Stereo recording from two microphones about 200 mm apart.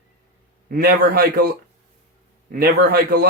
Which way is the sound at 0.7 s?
50° right (ahead or behind).